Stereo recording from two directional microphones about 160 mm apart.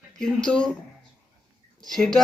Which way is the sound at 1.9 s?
Centre (ahead or behind).